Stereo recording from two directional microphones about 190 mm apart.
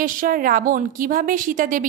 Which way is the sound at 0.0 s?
45° right (ahead or behind).